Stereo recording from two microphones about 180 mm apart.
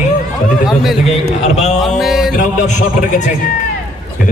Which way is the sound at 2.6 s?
40° left (ahead or behind).